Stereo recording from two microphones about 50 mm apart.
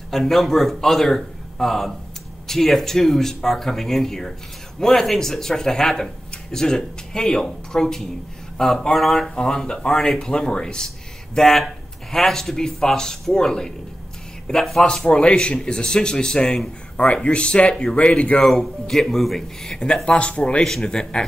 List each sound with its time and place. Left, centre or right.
0.1 s a man's voice: centre; by 18.4 s left
18.4 s speech: centre
20.6 s speech: centre